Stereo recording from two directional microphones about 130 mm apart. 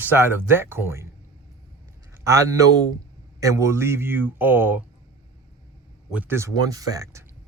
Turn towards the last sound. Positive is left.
turn(degrees=-25)  # may be behind; listen again after turning